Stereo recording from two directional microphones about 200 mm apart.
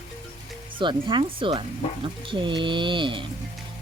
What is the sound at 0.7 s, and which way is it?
Speech, 25° right (ahead or behind).